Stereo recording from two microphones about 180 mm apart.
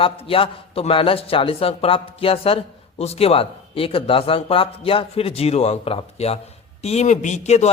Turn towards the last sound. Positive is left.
turn(degrees=40)  # may be behind; listen again after turning